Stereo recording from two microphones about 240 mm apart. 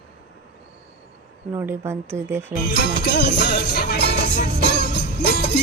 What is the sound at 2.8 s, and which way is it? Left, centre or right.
Music, left.